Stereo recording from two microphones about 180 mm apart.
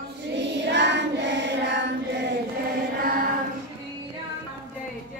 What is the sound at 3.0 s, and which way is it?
Choir, 55° right (ahead or behind).